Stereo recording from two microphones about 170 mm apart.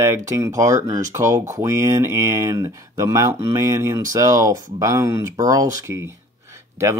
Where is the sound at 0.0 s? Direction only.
15° right (ahead or behind).